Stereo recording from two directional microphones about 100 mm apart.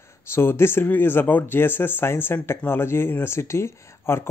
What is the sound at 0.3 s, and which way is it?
Speech, 25° left (ahead or behind).